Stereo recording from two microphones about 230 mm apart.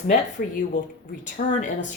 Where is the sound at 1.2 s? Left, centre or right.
Left.